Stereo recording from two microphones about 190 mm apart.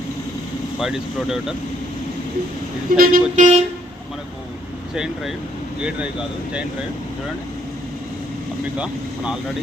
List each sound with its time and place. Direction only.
0.8 s speech: centre (ahead or behind)
3.0 s speech: 45° right (ahead or behind)
5.8 s speech: 5° right (ahead or behind)
8.8 s speech: 5° right (ahead or behind)